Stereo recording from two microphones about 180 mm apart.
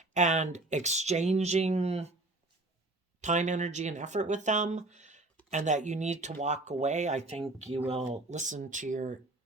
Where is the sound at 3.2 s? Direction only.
45° right (ahead or behind).